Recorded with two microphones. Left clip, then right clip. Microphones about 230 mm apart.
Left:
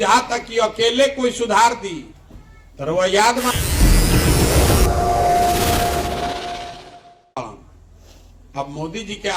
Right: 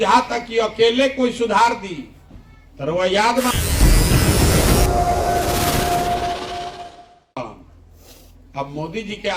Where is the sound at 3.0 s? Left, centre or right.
Left.